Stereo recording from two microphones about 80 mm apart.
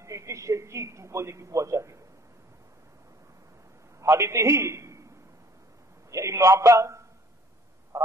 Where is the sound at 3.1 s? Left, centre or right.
Right.